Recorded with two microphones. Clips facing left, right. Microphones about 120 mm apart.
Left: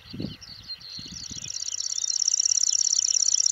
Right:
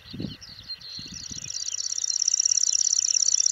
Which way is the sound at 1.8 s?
70° left (ahead or behind).